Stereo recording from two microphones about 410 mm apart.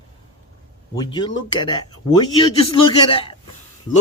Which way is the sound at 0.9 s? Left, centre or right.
Centre.